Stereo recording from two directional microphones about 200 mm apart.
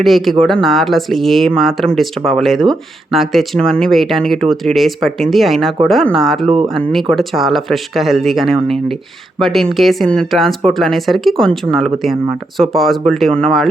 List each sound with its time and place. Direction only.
0.0 s speech: centre (ahead or behind)
6.5 s speech: 25° right (ahead or behind)
6.8 s speech: centre (ahead or behind)